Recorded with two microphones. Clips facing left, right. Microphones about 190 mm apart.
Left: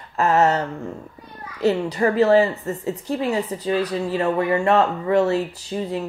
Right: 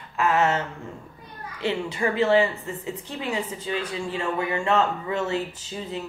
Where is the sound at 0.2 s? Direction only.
40° left (ahead or behind).